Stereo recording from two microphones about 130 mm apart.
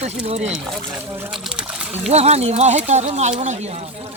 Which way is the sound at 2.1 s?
55° right (ahead or behind).